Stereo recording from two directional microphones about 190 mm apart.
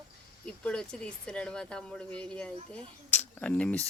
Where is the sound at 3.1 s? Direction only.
5° left (ahead or behind).